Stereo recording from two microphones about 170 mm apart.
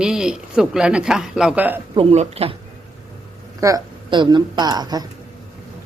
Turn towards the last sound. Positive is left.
turn(degrees=-25)  # may be behind; listen again after turning